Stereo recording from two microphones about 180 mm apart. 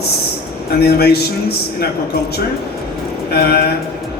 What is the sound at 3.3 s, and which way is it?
Speech, 60° left (ahead or behind).